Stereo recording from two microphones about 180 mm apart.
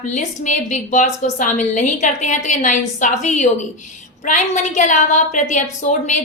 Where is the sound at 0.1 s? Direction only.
40° left (ahead or behind).